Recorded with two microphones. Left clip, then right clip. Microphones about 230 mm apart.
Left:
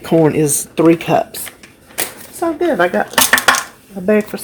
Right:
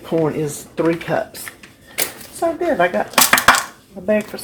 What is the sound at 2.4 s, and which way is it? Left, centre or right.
Speech, left.